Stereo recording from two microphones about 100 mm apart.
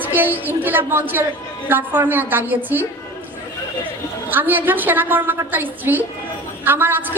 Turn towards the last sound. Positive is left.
turn(degrees=-20)  # may be behind; listen again after turning